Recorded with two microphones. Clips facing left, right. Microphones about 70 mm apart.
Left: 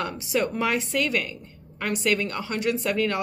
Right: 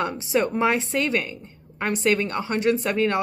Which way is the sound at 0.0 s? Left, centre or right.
Right.